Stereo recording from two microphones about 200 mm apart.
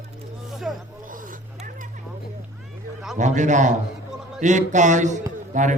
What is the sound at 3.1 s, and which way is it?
Speech, 40° right (ahead or behind).